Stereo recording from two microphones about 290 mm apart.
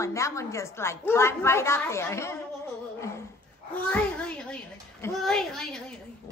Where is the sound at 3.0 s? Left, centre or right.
Centre.